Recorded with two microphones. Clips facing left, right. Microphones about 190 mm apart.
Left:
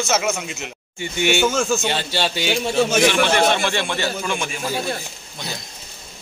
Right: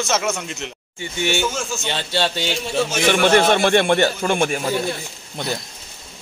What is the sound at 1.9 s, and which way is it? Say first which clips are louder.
Speech: right 1 dB; 5° left (ahead or behind).